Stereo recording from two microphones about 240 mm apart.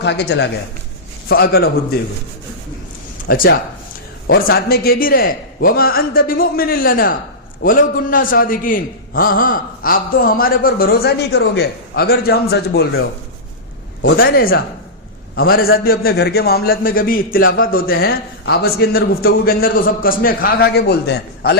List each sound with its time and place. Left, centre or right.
0.0 s a man's voice: left
3.3 s a man's voice: left